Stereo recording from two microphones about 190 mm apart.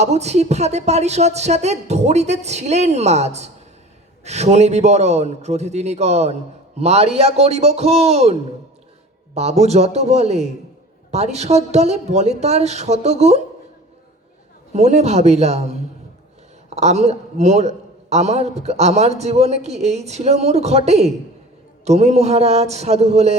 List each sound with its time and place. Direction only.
0.0 s a man's voice: 35° right (ahead or behind)
14.7 s a man's voice: 35° right (ahead or behind)
16.6 s a man's voice: 35° right (ahead or behind)